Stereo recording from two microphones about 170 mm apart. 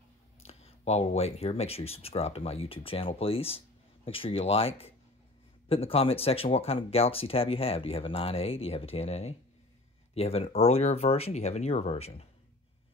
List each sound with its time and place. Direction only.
0.4 s speech: 40° left (ahead or behind)